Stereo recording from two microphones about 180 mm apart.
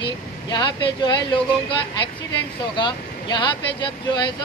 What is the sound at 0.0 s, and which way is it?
Speech, 25° left (ahead or behind).